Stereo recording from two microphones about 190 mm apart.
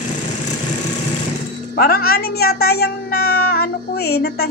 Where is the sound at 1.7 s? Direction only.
55° left (ahead or behind).